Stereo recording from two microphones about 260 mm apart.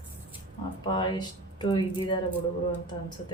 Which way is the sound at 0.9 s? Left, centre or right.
Centre.